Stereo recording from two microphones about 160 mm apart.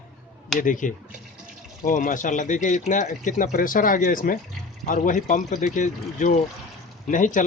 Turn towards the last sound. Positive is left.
turn(degrees=55)  # may be behind; listen again after turning